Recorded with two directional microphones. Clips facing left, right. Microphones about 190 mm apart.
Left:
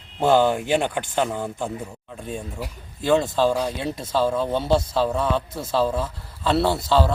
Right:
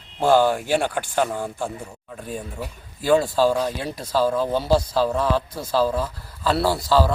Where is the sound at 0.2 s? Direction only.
20° left (ahead or behind).